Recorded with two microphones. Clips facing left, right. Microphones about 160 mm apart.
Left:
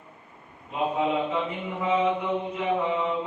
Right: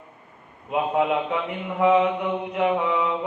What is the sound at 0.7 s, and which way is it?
Mantra, 70° right (ahead or behind).